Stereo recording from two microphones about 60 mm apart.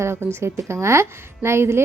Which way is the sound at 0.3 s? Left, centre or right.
Right.